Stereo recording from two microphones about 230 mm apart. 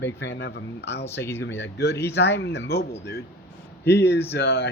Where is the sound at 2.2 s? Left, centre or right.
Left.